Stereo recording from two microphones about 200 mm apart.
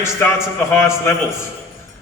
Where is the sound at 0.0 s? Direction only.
10° left (ahead or behind).